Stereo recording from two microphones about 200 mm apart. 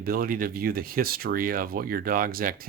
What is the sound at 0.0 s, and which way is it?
Speech, 45° right (ahead or behind).